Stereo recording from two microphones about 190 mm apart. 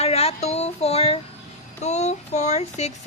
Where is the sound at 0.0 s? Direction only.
30° left (ahead or behind).